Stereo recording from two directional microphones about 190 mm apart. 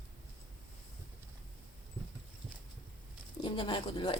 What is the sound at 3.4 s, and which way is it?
Speech, 25° left (ahead or behind).